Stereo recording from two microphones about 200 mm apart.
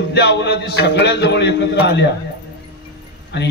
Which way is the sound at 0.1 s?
60° left (ahead or behind).